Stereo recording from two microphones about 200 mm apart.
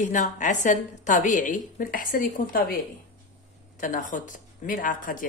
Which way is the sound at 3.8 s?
40° left (ahead or behind).